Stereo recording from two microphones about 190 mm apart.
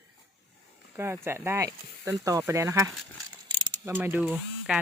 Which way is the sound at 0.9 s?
15° right (ahead or behind).